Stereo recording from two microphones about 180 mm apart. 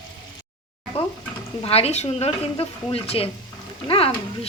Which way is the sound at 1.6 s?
35° left (ahead or behind).